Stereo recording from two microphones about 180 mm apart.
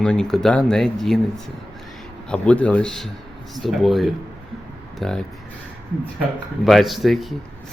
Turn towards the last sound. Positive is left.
turn(degrees=0)  # may be behind; listen again after turning